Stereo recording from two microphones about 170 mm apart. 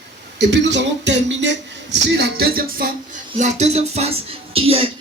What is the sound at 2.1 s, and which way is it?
Music, 75° right (ahead or behind).